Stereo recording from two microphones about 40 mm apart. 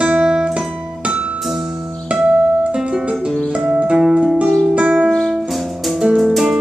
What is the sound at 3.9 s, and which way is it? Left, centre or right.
Music, centre.